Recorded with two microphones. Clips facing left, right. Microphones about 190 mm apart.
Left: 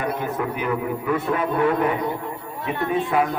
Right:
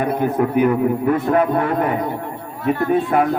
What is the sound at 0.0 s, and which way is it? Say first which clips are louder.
A man's voice: right 7 dB; 55° right (ahead or behind).